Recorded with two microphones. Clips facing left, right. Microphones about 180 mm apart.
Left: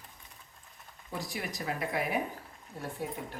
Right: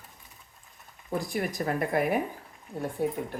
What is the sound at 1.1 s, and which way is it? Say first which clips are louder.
Speech: right 8 dB; 50° right (ahead or behind).